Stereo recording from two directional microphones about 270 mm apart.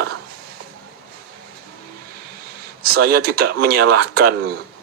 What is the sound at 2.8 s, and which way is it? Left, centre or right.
Speech, right.